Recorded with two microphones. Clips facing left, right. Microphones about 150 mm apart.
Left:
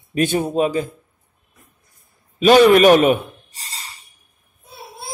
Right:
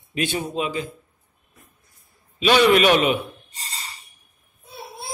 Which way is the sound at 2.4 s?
45° left (ahead or behind).